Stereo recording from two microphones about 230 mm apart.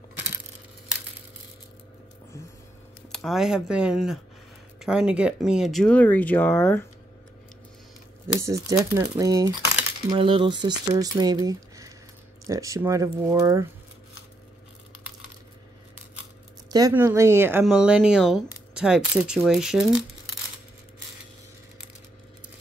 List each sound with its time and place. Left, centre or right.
3.1 s speech: centre
8.4 s speech: centre
16.7 s speech: centre